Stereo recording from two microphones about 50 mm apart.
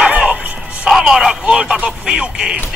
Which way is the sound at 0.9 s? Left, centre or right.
Centre.